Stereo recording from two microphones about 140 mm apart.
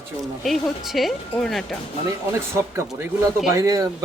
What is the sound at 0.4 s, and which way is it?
Speech, centre (ahead or behind).